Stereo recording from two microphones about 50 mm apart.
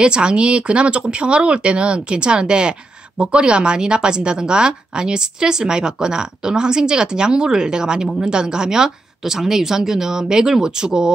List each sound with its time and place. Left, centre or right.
0.0 s speech: centre